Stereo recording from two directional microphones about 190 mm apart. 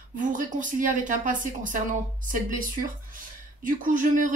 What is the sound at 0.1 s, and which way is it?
A woman's voice, 45° right (ahead or behind).